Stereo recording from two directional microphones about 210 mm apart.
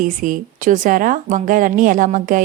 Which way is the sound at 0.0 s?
40° right (ahead or behind).